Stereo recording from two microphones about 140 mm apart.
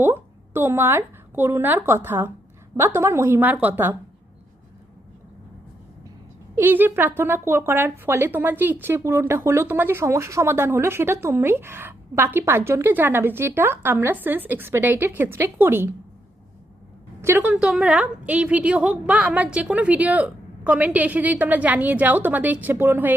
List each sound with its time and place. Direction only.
0.0 s a woman's voice: 15° right (ahead or behind)
6.6 s a woman's voice: 15° right (ahead or behind)
17.2 s a woman's voice: 20° right (ahead or behind)
17.5 s a woman's voice: 5° right (ahead or behind)